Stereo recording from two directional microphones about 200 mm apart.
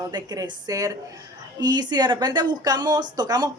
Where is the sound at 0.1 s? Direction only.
20° right (ahead or behind).